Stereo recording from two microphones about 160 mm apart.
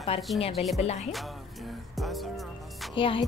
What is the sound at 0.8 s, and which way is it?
Music, 45° left (ahead or behind).